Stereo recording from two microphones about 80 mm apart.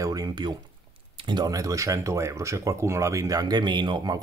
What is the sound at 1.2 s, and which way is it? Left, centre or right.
Speech, right.